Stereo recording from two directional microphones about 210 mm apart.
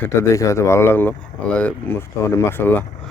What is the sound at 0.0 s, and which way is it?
Speech, 15° left (ahead or behind).